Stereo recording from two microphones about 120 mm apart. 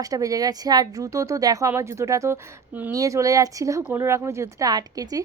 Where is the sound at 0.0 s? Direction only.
30° right (ahead or behind).